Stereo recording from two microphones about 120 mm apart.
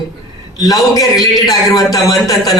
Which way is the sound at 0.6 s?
30° left (ahead or behind).